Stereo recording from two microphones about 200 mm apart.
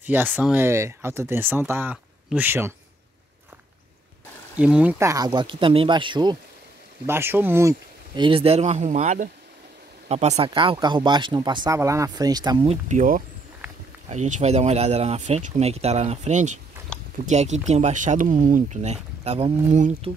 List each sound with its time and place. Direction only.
0.0 s speech: 10° right (ahead or behind)
4.6 s speech: 5° right (ahead or behind); by 6.3 s 25° right (ahead or behind)
7.1 s speech: 10° right (ahead or behind)
8.2 s speech: 30° right (ahead or behind)
12.6 s speech: 35° right (ahead or behind)